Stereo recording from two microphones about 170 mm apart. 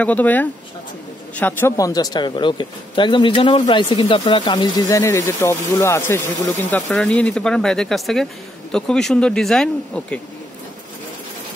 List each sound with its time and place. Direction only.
0.0 s speech: 10° left (ahead or behind)